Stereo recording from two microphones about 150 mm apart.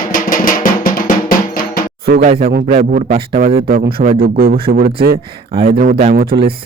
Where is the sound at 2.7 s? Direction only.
50° right (ahead or behind).